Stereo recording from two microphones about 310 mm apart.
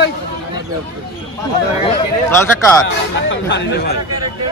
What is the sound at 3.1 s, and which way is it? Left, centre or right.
Speech, left.